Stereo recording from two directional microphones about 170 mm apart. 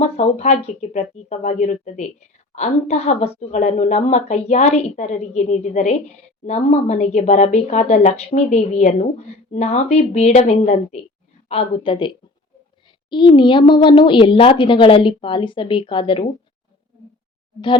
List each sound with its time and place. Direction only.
0.0 s a woman's voice: 40° left (ahead or behind)